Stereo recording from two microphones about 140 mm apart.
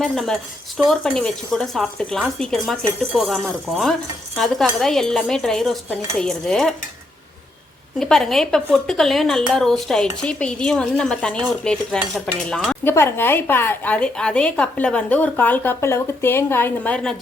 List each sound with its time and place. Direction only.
0.0 s speech: centre (ahead or behind)
7.9 s speech: centre (ahead or behind)
12.8 s speech: 20° left (ahead or behind)